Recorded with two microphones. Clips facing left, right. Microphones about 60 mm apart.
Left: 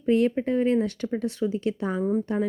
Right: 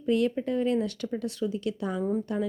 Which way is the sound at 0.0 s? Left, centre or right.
Left.